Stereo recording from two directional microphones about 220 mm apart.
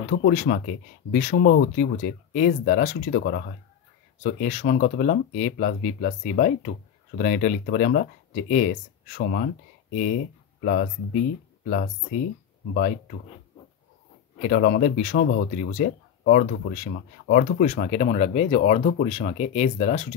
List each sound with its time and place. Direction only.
0.1 s speech: 40° left (ahead or behind)
10.6 s speech: 40° left (ahead or behind)
14.4 s speech: 40° left (ahead or behind)